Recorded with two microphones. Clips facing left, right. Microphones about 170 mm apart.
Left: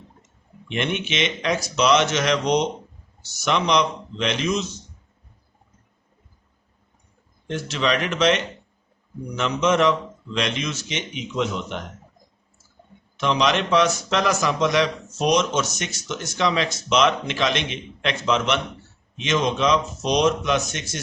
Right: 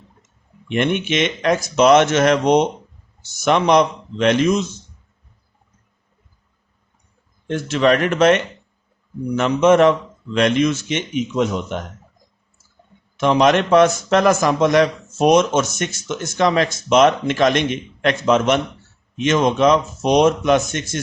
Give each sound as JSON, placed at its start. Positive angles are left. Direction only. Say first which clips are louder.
{"t": 0.7, "sound": "a man's voice", "louder": "right 6 dB", "side_deg": -50}
{"t": 7.4, "sound": "a man's voice", "louder": "right 7 dB", "side_deg": -50}
{"t": 13.1, "sound": "a man's voice", "louder": "right 6 dB", "side_deg": -50}